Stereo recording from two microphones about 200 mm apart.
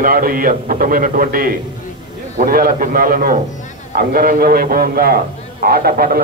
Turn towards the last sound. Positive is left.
turn(degrees=-50)  # may be behind; listen again after turning